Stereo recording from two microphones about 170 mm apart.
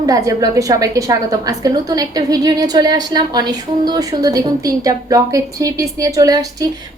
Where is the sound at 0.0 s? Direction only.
20° right (ahead or behind).